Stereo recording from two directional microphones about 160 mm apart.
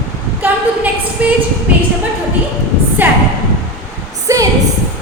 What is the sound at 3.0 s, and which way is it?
Speech, 10° right (ahead or behind).